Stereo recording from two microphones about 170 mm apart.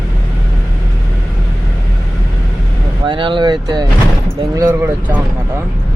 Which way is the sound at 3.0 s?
30° right (ahead or behind).